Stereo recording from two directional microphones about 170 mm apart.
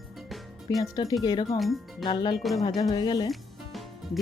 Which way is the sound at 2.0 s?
25° left (ahead or behind).